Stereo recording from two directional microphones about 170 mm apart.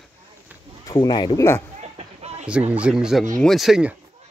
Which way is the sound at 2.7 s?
5° right (ahead or behind).